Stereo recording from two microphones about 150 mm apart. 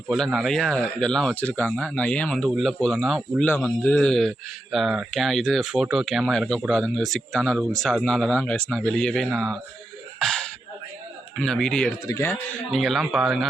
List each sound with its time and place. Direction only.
0.1 s speech: centre (ahead or behind)
3.5 s speech: 10° left (ahead or behind)
10.2 s a sound: 5° left (ahead or behind)
11.3 s speech: 5° left (ahead or behind)
12.0 s a man's voice: 20° left (ahead or behind)
12.7 s speech: centre (ahead or behind)